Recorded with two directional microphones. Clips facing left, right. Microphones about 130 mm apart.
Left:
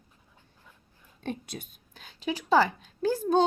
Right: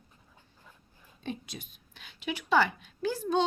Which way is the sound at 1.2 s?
55° left (ahead or behind).